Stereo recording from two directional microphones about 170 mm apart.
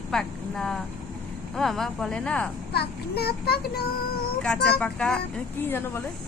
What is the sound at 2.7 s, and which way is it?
A child's voice, 70° left (ahead or behind).